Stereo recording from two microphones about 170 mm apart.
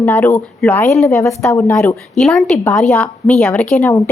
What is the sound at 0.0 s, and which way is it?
A woman's voice, 10° left (ahead or behind).